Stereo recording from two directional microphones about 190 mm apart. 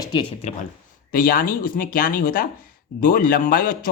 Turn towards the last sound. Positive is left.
turn(degrees=45)  # may be behind; listen again after turning